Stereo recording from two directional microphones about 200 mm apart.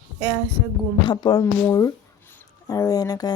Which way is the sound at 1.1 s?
20° left (ahead or behind).